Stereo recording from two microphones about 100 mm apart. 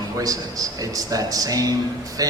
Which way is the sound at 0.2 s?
35° right (ahead or behind).